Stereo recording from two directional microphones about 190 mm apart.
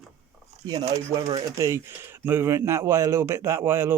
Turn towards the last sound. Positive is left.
turn(degrees=-10)  # may be behind; listen again after turning